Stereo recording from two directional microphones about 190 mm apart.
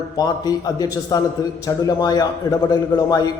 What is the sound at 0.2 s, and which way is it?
A man's voice, 20° left (ahead or behind).